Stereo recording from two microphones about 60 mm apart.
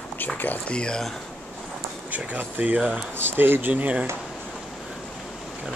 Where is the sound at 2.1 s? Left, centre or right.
Right.